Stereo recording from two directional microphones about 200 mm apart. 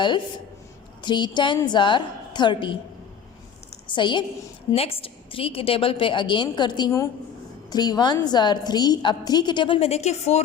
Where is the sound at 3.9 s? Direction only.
25° left (ahead or behind).